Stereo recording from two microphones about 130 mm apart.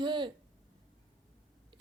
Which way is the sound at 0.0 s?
35° right (ahead or behind).